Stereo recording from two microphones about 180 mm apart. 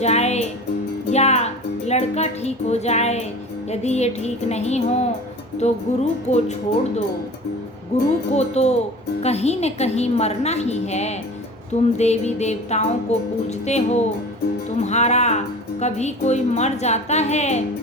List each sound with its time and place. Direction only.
0.0 s music: 40° left (ahead or behind)
1.1 s speech: 35° left (ahead or behind)
3.7 s music: 40° left (ahead or behind)
7.9 s music: 40° left (ahead or behind)